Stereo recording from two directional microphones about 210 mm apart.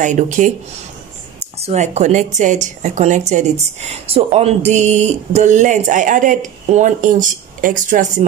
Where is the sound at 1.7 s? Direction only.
35° right (ahead or behind).